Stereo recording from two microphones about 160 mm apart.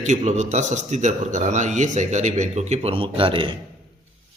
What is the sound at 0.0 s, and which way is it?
A man's voice, 45° right (ahead or behind).